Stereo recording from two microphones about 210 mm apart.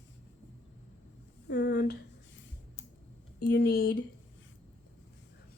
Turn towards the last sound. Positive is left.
turn(degrees=50)  # may be behind; listen again after turning